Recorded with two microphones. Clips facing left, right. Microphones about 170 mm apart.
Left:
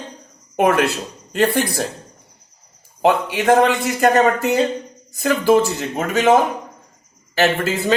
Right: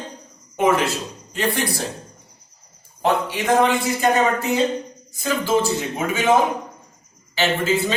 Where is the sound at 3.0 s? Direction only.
75° left (ahead or behind).